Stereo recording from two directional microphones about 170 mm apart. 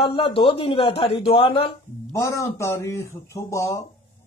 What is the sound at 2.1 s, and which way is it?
Speech, 20° left (ahead or behind).